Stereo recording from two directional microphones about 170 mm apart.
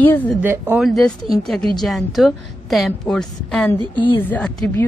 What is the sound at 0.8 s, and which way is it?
A woman's voice, centre (ahead or behind).